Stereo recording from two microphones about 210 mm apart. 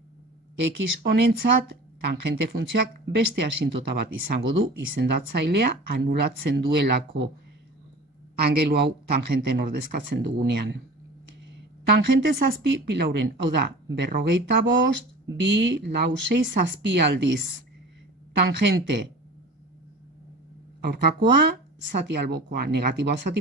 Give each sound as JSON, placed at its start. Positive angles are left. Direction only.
{"t": 0.6, "sound": "a man's voice", "side_deg": -55}
{"t": 8.4, "sound": "a man's voice", "side_deg": -50}
{"t": 11.9, "sound": "speech", "side_deg": -50}
{"t": 18.4, "sound": "speech", "side_deg": -55}
{"t": 20.8, "sound": "a man's voice", "side_deg": -55}